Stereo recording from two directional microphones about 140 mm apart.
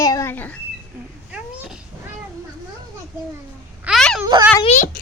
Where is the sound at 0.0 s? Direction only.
25° left (ahead or behind).